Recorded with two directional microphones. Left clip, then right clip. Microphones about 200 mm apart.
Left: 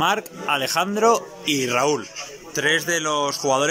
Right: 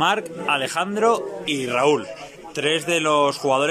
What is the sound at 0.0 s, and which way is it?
A man's voice, centre (ahead or behind).